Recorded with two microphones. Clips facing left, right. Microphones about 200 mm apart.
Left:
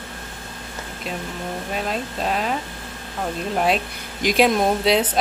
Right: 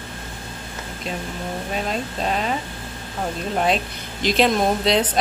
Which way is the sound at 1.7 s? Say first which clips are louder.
Even; centre (ahead or behind).